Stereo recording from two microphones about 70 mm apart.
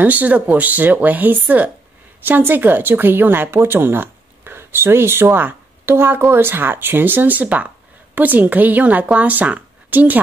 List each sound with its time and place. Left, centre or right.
0.0 s speech: right